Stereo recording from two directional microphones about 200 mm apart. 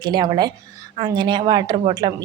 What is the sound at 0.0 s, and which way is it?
A woman's voice, 20° right (ahead or behind).